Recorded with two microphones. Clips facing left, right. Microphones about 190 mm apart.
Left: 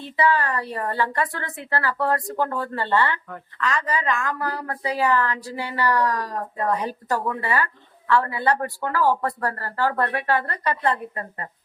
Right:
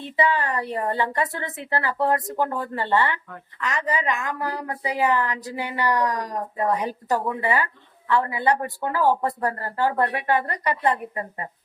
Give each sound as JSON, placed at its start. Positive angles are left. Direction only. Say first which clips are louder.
{"t": 0.0, "sound": "a woman's voice", "louder": "left 1 dB", "side_deg": -20}